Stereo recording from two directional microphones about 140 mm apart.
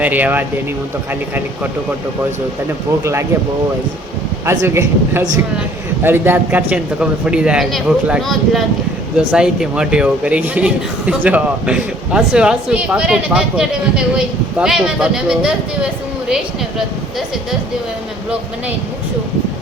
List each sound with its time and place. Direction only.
0.0 s a man's voice: 10° right (ahead or behind)
3.0 s speech: 20° right (ahead or behind)
4.4 s a man's voice: 20° right (ahead or behind); by 17.2 s centre (ahead or behind)